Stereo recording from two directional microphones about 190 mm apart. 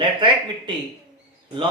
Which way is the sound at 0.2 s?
25° right (ahead or behind).